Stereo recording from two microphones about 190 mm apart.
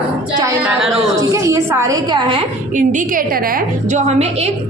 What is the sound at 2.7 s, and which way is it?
Speech, 40° right (ahead or behind).